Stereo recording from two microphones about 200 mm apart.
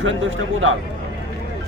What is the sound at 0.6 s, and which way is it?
Speech, 75° right (ahead or behind).